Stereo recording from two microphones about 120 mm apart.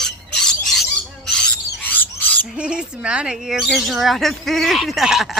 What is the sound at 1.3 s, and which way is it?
Owl, 5° left (ahead or behind).